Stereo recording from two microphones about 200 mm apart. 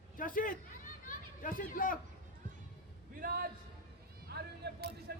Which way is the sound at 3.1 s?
45° right (ahead or behind).